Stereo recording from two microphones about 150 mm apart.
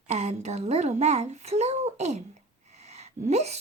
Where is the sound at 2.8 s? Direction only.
45° right (ahead or behind).